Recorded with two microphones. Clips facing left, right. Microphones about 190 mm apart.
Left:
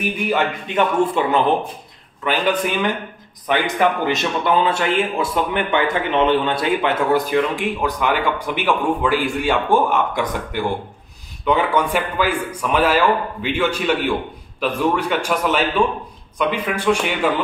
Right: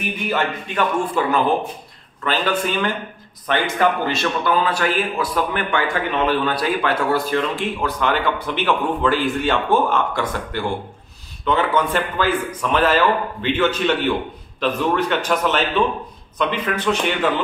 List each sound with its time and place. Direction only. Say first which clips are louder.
0.3 s a man's voice: left 1 dB; 20° left (ahead or behind)